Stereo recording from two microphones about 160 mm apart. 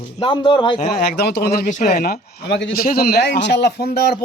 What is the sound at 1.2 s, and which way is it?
Speech, 85° left.